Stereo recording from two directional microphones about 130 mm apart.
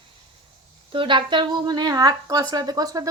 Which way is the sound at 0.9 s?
40° right (ahead or behind).